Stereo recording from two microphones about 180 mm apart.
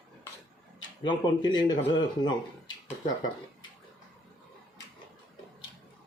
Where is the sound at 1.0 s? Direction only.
25° left (ahead or behind).